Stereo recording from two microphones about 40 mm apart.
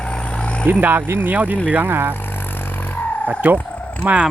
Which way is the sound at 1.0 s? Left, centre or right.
Right.